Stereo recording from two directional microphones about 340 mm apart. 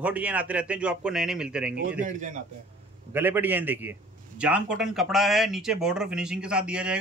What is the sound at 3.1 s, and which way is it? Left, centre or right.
A man's voice, centre.